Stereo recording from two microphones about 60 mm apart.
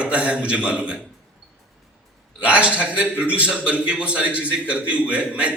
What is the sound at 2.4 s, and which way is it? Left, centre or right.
A man's voice, right.